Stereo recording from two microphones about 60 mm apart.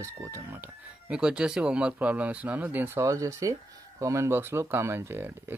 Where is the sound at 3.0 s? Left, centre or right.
Right.